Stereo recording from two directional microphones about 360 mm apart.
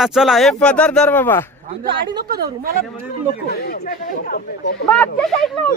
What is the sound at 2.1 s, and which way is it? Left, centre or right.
Speech, centre.